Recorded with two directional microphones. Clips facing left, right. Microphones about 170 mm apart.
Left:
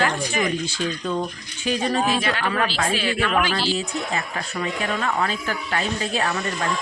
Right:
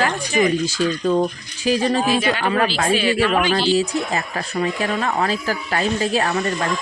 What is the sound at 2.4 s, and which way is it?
Speech, 35° right (ahead or behind).